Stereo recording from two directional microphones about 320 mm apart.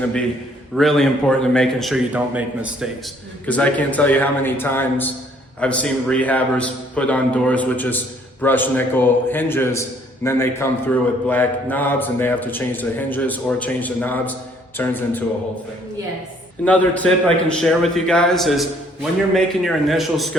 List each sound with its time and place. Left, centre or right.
0.8 s a man's voice: centre
16.6 s a man's voice: centre